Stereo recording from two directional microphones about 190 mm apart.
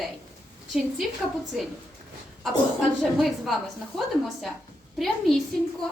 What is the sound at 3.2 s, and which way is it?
Speech, centre (ahead or behind).